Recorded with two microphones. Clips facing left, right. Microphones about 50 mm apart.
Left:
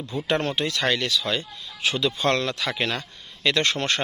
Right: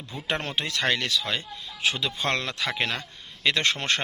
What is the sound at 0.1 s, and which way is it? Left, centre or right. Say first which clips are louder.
Speech: left 5 dB; centre.